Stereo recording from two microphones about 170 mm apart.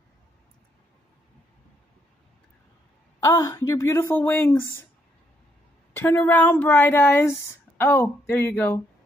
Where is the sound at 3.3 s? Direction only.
20° left (ahead or behind).